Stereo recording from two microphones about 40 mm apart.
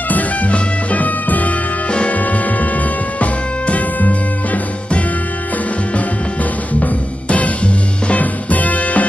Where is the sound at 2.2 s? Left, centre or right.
Left.